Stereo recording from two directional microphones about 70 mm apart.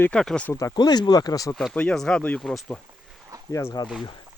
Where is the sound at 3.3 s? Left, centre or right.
Right.